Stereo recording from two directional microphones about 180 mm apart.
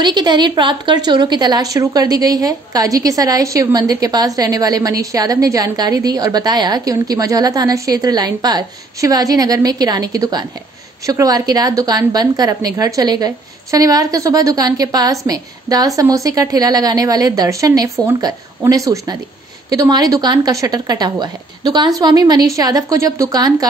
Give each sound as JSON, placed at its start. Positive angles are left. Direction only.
{"t": 0.0, "sound": "a woman's voice", "side_deg": -25}